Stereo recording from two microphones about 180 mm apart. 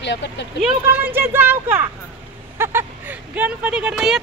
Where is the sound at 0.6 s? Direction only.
10° right (ahead or behind).